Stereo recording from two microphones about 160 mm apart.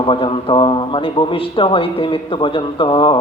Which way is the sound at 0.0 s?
30° left (ahead or behind).